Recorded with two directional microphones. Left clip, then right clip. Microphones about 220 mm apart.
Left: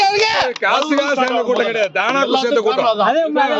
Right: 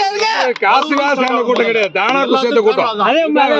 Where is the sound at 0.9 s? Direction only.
45° right (ahead or behind).